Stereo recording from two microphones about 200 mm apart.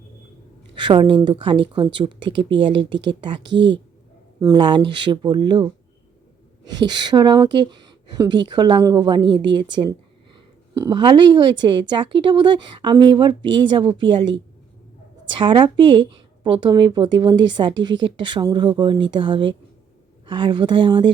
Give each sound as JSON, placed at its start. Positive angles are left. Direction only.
{"t": 0.7, "sound": "a woman's voice", "side_deg": -25}
{"t": 2.9, "sound": "speech", "side_deg": -65}
{"t": 4.5, "sound": "speech", "side_deg": -25}
{"t": 6.8, "sound": "speech", "side_deg": -20}
{"t": 10.8, "sound": "speech", "side_deg": -20}
{"t": 15.4, "sound": "speech", "side_deg": -25}